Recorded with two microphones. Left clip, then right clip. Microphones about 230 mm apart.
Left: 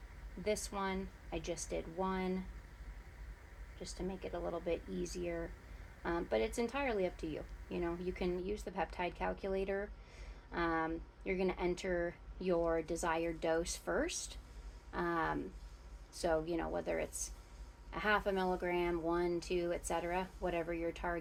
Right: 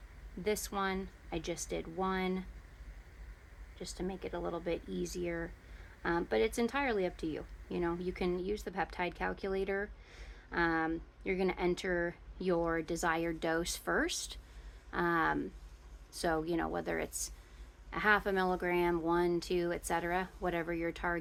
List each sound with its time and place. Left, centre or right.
0.4 s speech: right
3.8 s speech: right